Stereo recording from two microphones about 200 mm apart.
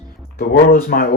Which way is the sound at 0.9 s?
50° left (ahead or behind).